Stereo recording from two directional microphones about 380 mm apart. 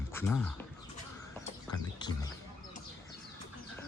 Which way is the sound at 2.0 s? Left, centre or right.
Centre.